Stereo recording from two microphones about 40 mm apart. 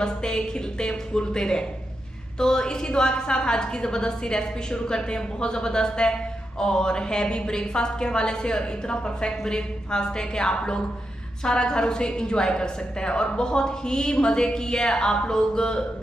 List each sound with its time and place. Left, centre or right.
0.0 s a woman's voice: centre